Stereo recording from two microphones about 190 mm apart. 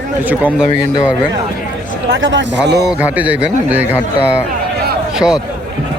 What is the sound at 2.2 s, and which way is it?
Speech, 75° right (ahead or behind).